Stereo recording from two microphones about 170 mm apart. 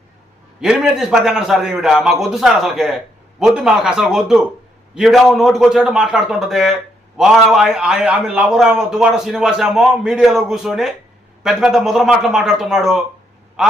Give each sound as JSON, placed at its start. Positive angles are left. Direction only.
{"t": 0.6, "sound": "a man's voice", "side_deg": -5}